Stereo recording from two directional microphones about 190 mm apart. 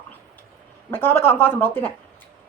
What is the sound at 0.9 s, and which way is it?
A woman's voice, 10° left (ahead or behind).